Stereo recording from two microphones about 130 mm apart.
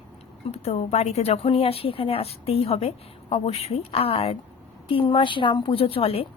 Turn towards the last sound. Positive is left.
turn(degrees=45)  # may be behind; listen again after turning